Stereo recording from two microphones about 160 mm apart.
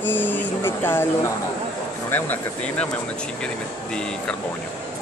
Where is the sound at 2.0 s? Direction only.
10° left (ahead or behind).